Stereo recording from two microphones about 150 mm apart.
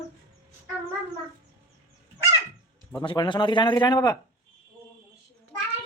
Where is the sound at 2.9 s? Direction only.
30° left (ahead or behind).